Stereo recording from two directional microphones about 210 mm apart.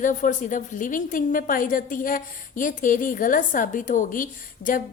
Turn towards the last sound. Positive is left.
turn(degrees=40)  # may be behind; listen again after turning